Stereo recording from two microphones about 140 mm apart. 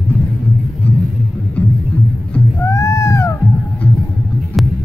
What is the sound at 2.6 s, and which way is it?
Cat, 20° left (ahead or behind).